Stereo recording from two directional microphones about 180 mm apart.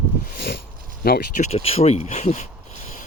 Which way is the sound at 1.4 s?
35° left (ahead or behind).